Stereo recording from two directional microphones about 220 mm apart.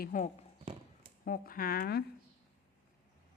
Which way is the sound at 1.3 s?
40° left (ahead or behind).